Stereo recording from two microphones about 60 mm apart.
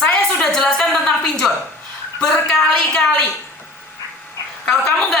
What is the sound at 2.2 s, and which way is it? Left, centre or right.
A woman's voice, centre.